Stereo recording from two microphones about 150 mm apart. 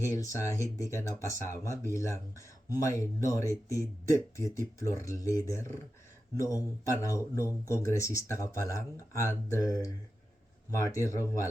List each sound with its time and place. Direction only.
0.0 s speech: 20° left (ahead or behind)